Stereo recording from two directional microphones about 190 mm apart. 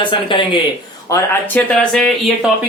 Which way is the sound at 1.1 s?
10° left (ahead or behind).